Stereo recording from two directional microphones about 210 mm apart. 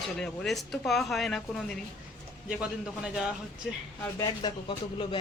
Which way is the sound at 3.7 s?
Centre (ahead or behind).